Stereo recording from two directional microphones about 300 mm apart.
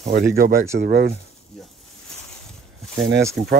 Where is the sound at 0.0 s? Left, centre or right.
Right.